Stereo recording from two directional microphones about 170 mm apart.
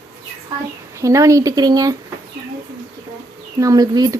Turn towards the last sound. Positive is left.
turn(degrees=-25)  # may be behind; listen again after turning